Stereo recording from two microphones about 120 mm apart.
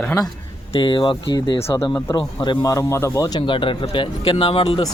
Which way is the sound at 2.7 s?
25° left (ahead or behind).